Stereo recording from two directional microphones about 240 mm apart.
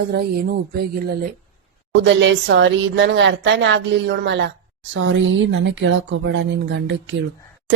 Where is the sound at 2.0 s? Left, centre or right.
Right.